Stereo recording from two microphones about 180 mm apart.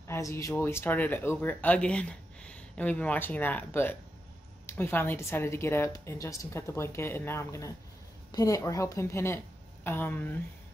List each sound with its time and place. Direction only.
0.1 s speech: 15° left (ahead or behind)